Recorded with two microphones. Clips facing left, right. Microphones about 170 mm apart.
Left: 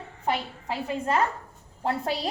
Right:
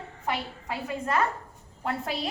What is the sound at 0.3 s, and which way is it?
A woman's voice, 30° left (ahead or behind).